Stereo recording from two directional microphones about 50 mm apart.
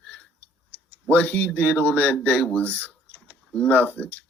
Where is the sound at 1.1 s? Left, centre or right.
Left.